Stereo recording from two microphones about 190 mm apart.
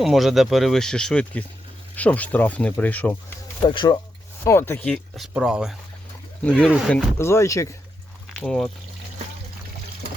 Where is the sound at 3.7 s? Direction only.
25° left (ahead or behind).